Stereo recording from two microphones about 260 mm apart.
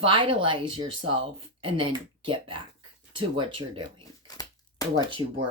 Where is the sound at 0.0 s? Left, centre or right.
Centre.